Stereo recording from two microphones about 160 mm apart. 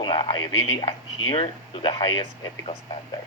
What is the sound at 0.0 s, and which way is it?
Speech, 30° left (ahead or behind).